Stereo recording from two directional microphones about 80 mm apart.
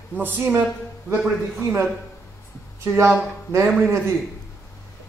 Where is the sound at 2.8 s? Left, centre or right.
Right.